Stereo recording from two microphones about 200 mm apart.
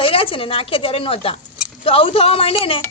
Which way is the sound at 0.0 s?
25° left (ahead or behind).